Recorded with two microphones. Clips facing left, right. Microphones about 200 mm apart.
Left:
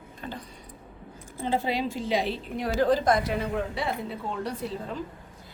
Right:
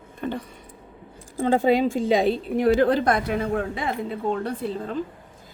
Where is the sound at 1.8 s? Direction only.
45° right (ahead or behind).